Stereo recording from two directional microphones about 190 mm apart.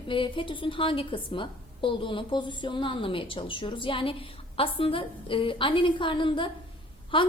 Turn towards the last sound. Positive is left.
turn(degrees=25)  # may be behind; listen again after turning